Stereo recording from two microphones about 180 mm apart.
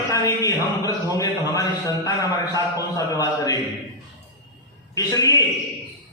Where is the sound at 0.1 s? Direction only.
20° left (ahead or behind).